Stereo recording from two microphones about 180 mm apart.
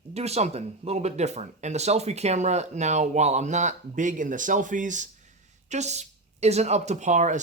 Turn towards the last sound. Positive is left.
turn(degrees=-40)  # may be behind; listen again after turning